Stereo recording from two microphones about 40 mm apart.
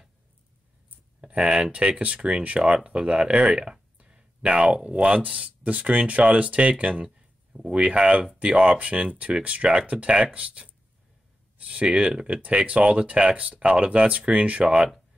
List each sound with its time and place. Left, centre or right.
1.2 s speech: right
7.8 s speech: right
12.4 s speech: right